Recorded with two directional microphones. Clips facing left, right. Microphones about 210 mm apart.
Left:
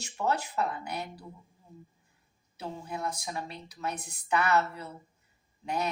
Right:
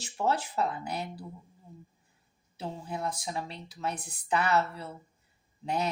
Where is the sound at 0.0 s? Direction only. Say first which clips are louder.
Right 1 dB; 30° right (ahead or behind).